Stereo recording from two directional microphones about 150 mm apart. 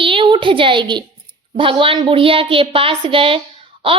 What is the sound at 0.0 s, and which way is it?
A woman's voice, 35° right (ahead or behind).